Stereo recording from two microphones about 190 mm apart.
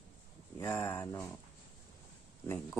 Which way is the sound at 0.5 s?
15° left (ahead or behind).